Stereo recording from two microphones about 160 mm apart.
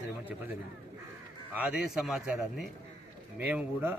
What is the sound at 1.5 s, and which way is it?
A man's voice, 10° right (ahead or behind).